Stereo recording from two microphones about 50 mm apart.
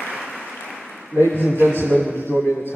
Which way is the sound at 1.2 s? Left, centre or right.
Left.